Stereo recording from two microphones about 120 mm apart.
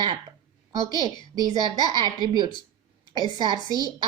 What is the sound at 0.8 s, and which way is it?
A woman's voice, 35° right (ahead or behind).